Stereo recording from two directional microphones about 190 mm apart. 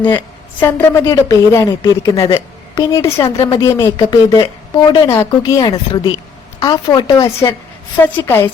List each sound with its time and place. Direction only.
0.6 s a woman's voice: 15° left (ahead or behind)